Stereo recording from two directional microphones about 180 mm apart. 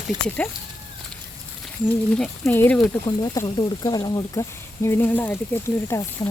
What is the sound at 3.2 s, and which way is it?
Speech, 25° left (ahead or behind).